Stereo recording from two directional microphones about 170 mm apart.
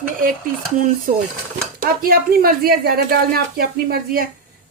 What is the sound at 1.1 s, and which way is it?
A woman's voice, 55° right (ahead or behind).